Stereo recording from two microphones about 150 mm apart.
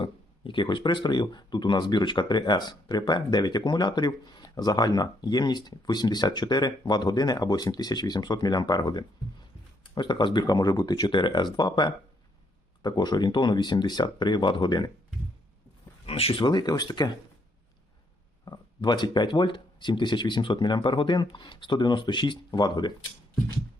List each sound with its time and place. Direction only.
0.0 s speech: 35° left (ahead or behind)
16.0 s speech: 40° left (ahead or behind)
18.4 s speech: 30° left (ahead or behind)